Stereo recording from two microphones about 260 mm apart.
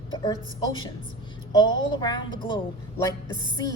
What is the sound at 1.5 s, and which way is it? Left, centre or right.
A woman's voice, centre.